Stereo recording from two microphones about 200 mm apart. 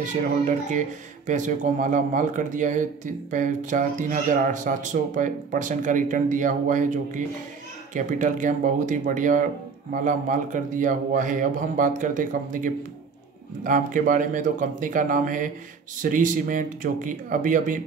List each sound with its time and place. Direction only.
0.0 s speech: 40° right (ahead or behind)